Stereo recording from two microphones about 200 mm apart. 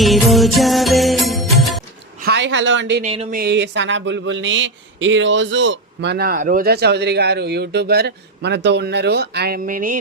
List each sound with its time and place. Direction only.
0.0 s music: centre (ahead or behind)
2.2 s a woman's voice: 60° right (ahead or behind)
3.0 s speech: 30° right (ahead or behind)
3.3 s speech: 55° right (ahead or behind)